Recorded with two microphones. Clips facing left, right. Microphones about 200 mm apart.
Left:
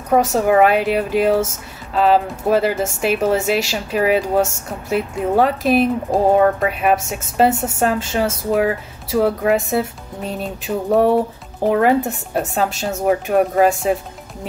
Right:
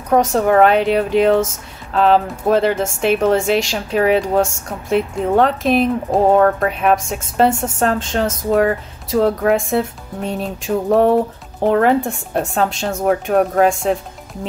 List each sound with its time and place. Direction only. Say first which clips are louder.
0.1 s speech: right 1 dB; 5° left (ahead or behind)